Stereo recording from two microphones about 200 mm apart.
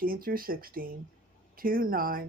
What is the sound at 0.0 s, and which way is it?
Speech, 45° right (ahead or behind).